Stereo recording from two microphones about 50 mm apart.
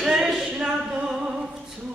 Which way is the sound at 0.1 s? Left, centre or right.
Centre.